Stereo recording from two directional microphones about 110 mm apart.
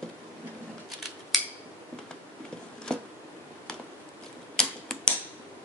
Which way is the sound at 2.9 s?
5° left (ahead or behind).